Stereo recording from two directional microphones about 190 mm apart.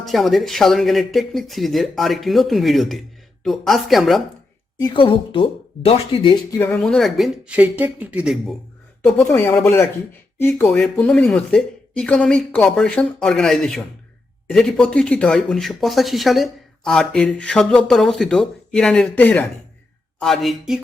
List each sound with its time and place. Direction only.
0.0 s speech: centre (ahead or behind)
4.8 s speech: 25° left (ahead or behind)
6.6 s speech: 5° left (ahead or behind)
9.2 s speech: 15° left (ahead or behind)